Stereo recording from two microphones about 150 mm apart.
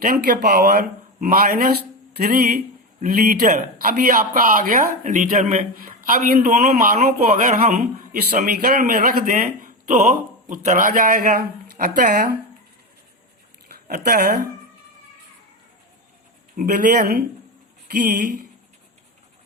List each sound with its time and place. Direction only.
0.0 s speech: 85° right
3.0 s speech: 65° right (ahead or behind); by 12.4 s 85° right
13.8 s speech: 80° right
16.6 s speech: 65° right (ahead or behind); by 17.2 s 90° right